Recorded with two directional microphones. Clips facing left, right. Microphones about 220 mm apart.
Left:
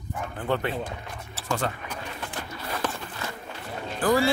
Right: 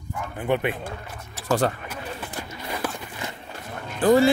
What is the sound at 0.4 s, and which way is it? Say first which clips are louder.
Speech: right 4 dB; 15° right (ahead or behind).